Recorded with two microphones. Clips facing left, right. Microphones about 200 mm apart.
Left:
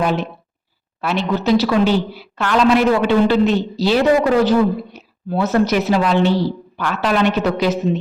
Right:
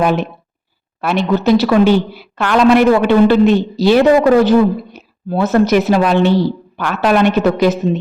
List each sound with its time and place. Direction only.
0.0 s a woman's voice: 55° right (ahead or behind)